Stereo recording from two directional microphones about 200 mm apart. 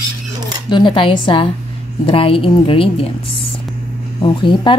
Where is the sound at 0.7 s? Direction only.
25° left (ahead or behind).